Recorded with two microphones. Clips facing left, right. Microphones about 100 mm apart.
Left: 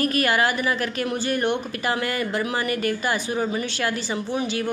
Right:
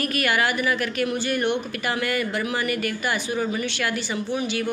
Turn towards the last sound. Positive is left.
turn(degrees=35)  # may be behind; listen again after turning